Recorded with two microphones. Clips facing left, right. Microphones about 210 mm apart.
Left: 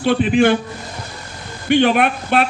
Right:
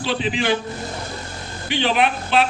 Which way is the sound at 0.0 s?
55° left (ahead or behind).